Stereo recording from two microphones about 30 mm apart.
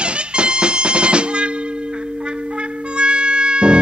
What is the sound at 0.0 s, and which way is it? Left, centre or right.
Music, right.